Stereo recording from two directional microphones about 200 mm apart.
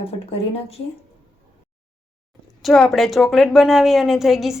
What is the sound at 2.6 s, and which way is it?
A woman's voice, centre (ahead or behind).